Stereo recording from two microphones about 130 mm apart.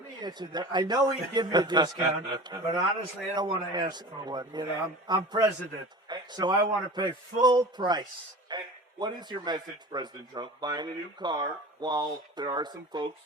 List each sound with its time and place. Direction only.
0.2 s a man's voice: 35° right (ahead or behind)